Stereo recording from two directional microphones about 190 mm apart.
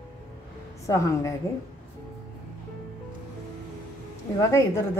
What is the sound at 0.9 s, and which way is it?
Speech, 15° left (ahead or behind).